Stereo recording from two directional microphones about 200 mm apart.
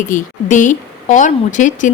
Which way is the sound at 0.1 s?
40° left (ahead or behind).